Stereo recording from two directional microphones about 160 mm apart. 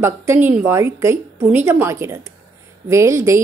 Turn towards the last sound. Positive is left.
turn(degrees=-15)  # may be behind; listen again after turning